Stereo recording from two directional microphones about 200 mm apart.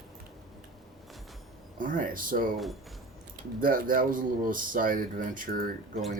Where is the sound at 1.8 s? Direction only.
40° right (ahead or behind).